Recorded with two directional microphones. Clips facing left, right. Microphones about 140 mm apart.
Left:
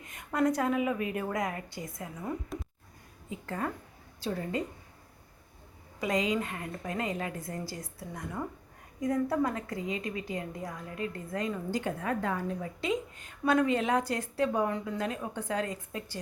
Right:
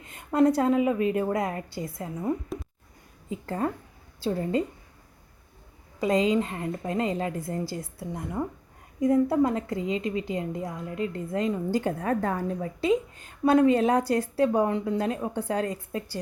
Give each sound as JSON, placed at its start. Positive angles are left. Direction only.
{"t": 0.0, "sound": "a woman's voice", "side_deg": -30}
{"t": 6.0, "sound": "a woman's voice", "side_deg": -30}